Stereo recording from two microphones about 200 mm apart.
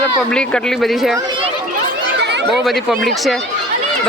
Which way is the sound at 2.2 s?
55° right (ahead or behind).